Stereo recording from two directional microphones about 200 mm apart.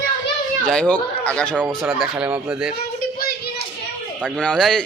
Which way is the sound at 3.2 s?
50° left (ahead or behind).